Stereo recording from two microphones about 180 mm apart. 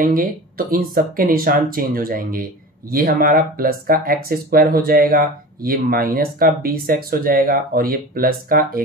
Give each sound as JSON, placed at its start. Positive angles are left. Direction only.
{"t": 0.0, "sound": "speech", "side_deg": -50}